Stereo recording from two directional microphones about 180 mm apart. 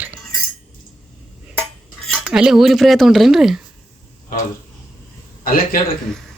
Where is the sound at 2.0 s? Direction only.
Centre (ahead or behind).